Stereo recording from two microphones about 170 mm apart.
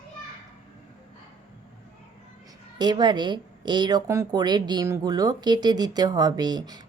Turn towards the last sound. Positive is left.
turn(degrees=-25)  # may be behind; listen again after turning